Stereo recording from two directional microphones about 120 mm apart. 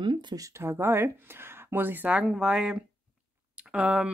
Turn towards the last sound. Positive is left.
turn(degrees=-10)  # may be behind; listen again after turning